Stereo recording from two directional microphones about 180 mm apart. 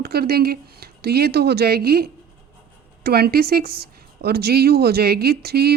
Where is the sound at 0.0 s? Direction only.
60° right (ahead or behind).